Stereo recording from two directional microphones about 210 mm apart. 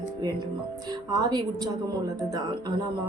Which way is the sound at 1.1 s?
20° right (ahead or behind).